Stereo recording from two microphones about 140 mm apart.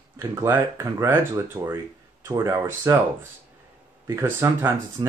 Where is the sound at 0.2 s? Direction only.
20° right (ahead or behind).